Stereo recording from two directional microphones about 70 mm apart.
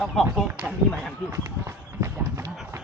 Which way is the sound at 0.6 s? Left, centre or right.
Right.